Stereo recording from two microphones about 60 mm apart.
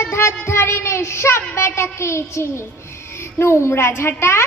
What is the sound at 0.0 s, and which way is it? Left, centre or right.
A child's voice, left.